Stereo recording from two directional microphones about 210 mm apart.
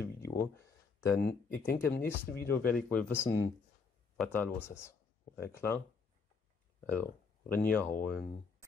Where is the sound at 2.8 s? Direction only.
5° left (ahead or behind).